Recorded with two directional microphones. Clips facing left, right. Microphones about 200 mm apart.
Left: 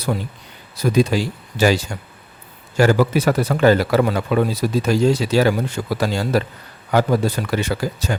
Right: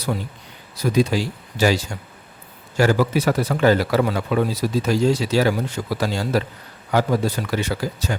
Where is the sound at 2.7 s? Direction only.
55° left (ahead or behind).